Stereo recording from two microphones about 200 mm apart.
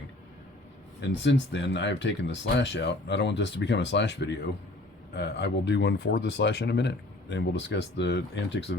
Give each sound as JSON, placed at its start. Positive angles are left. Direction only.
{"t": 1.0, "sound": "speech", "side_deg": 60}